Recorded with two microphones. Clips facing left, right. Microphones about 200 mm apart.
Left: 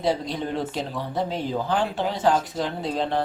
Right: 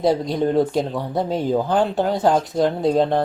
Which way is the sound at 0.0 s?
45° right (ahead or behind).